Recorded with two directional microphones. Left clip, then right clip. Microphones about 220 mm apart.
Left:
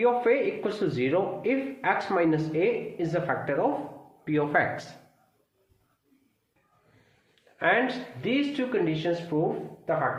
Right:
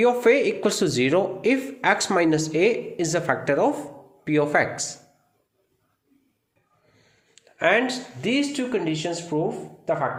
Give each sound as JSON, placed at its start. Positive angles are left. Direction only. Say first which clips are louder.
{"t": 0.0, "sound": "a man's voice", "louder": "right 5 dB", "side_deg": -45}
{"t": 7.6, "sound": "speech", "louder": "right 4 dB", "side_deg": -40}